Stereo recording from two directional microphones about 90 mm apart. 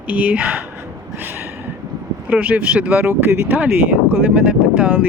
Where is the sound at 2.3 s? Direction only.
15° right (ahead or behind).